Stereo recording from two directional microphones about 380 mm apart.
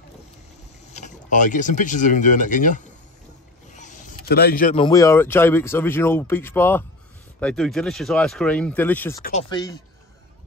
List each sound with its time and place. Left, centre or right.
0.9 s speech: centre